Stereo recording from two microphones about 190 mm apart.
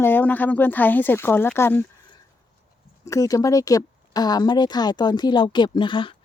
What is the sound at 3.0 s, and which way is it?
Speech, 15° left (ahead or behind).